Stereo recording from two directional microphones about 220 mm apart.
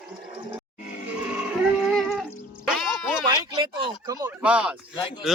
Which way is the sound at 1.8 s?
Centre (ahead or behind).